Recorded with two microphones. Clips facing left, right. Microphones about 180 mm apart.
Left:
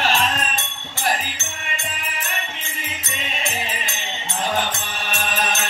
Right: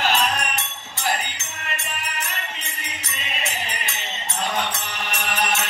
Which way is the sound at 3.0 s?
70° left (ahead or behind).